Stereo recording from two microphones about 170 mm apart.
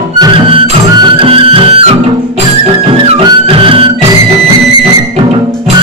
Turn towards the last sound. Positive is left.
turn(degrees=-30)  # may be behind; listen again after turning